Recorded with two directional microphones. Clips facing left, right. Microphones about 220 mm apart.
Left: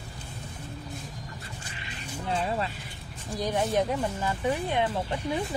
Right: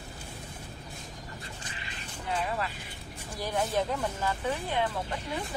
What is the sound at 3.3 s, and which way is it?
Speech, 20° left (ahead or behind).